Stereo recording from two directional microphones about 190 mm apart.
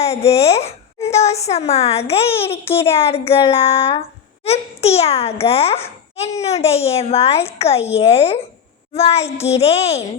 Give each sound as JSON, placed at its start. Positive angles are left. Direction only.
{"t": 0.1, "sound": "a woman's voice", "side_deg": 35}